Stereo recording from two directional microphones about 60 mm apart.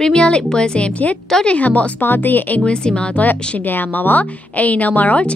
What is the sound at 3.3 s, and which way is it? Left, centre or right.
A woman's voice, left.